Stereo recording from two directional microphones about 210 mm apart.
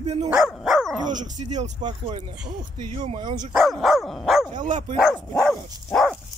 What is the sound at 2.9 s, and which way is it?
Speech, 30° right (ahead or behind).